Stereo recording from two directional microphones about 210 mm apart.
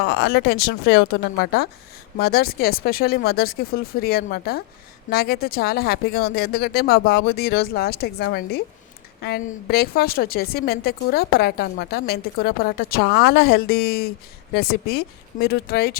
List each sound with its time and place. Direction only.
0.0 s a woman's voice: 50° left (ahead or behind)